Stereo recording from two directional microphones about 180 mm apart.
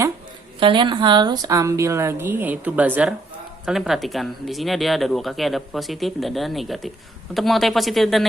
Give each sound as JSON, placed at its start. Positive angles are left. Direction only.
{"t": 0.6, "sound": "a woman's voice", "side_deg": -25}